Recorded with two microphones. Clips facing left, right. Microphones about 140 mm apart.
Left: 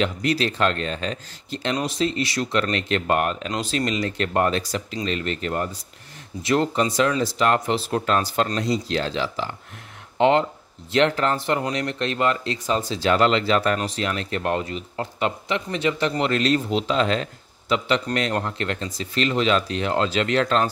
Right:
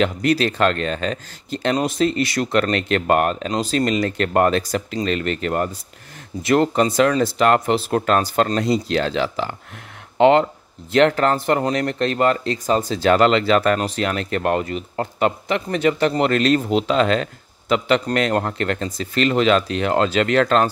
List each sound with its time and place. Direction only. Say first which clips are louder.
0.0 s speech: right 4 dB; 50° right (ahead or behind)
5.0 s speech: right 3 dB; 65° right (ahead or behind)
10.9 s speech: right 4 dB; 50° right (ahead or behind)